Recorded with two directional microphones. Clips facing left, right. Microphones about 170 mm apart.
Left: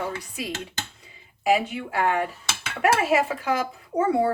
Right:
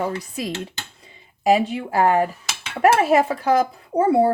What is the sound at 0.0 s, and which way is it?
A child's voice, 40° right (ahead or behind).